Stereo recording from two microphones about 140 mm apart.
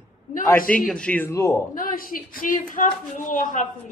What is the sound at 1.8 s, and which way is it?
A woman's voice, 80° left.